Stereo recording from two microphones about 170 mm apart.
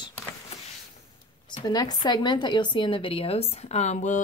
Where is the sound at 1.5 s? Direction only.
25° left (ahead or behind); by 4.2 s 45° left (ahead or behind).